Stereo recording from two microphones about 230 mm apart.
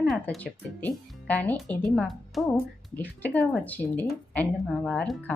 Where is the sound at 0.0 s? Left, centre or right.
Centre.